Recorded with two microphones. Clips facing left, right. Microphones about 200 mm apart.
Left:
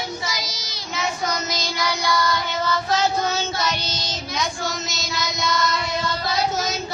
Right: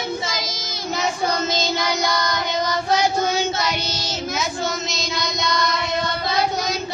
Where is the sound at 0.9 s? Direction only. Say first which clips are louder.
Right 3 dB; 30° right (ahead or behind).